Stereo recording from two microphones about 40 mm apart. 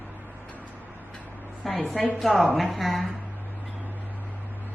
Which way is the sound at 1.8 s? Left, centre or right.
Centre.